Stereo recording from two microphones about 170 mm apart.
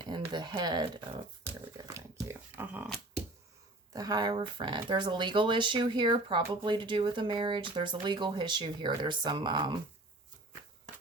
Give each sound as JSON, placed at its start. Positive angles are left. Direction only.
{"t": 0.0, "sound": "speech", "side_deg": -25}
{"t": 1.7, "sound": "crumpling", "side_deg": -20}
{"t": 3.9, "sound": "speech", "side_deg": -20}